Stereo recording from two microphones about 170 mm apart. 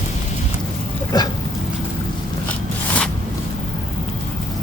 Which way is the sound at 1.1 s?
20° left (ahead or behind).